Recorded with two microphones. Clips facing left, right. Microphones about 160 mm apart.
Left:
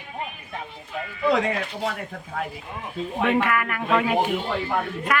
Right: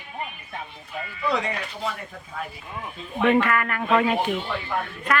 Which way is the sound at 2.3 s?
70° left (ahead or behind).